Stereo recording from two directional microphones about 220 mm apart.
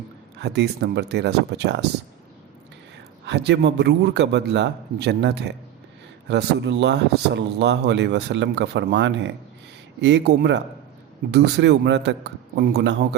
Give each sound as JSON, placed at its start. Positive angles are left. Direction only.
{"t": 0.3, "sound": "speech", "side_deg": -50}
{"t": 3.2, "sound": "speech", "side_deg": -50}